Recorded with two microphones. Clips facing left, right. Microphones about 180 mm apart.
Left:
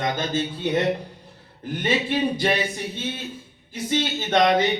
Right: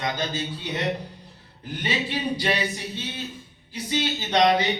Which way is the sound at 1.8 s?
50° left (ahead or behind).